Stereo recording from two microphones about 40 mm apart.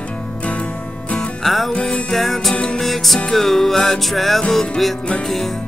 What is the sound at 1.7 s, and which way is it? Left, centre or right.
Music, left.